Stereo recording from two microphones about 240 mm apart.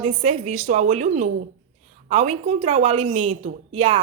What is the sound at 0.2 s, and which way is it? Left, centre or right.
A woman's voice, right.